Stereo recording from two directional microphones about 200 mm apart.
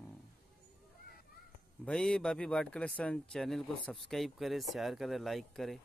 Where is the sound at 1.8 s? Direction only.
5° left (ahead or behind).